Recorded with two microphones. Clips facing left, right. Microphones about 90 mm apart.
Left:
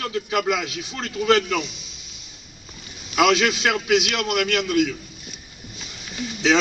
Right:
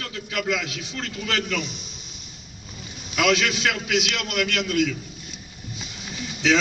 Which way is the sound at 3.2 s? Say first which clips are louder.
Left 3 dB; 35° left (ahead or behind).